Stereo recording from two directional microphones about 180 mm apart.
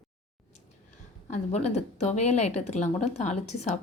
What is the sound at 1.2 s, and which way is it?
Speech, 40° left (ahead or behind).